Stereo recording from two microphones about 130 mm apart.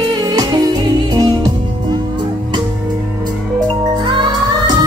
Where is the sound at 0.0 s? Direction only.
30° right (ahead or behind).